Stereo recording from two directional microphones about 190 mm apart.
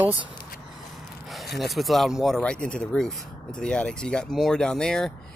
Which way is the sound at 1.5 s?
Centre (ahead or behind).